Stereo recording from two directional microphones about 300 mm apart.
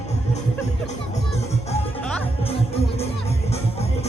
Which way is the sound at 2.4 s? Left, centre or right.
Centre.